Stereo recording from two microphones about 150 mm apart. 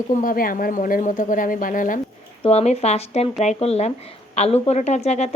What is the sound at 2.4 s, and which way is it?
Speech, 45° left (ahead or behind).